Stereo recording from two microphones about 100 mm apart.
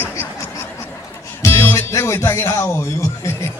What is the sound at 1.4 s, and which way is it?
Music, 25° left (ahead or behind).